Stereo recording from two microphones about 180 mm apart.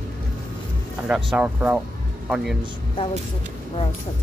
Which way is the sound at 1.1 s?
5° right (ahead or behind).